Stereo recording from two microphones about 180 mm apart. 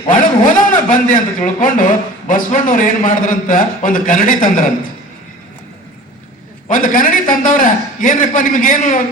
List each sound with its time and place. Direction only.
0.1 s a man's voice: 50° left (ahead or behind)
6.7 s a man's voice: 50° left (ahead or behind)